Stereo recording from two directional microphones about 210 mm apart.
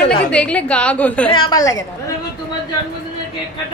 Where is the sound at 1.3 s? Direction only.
20° left (ahead or behind).